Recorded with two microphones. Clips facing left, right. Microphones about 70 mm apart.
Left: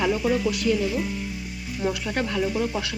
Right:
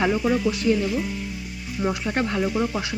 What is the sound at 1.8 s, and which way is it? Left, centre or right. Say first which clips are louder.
Speech: right 2 dB; right.